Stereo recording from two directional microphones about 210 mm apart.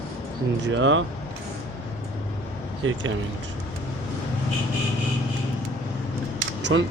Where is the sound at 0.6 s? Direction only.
60° right (ahead or behind).